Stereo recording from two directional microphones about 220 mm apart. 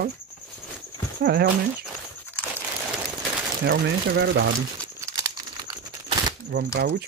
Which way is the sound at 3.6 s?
45° right (ahead or behind).